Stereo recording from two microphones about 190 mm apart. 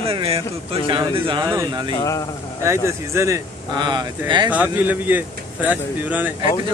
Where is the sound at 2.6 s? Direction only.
15° right (ahead or behind).